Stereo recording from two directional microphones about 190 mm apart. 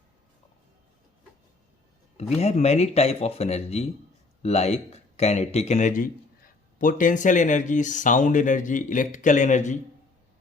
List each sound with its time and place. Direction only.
2.1 s speech: 35° left (ahead or behind)